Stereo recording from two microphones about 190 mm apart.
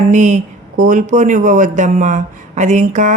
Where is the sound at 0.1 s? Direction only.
40° right (ahead or behind).